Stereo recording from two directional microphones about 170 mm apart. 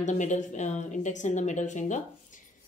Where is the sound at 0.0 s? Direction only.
45° left (ahead or behind).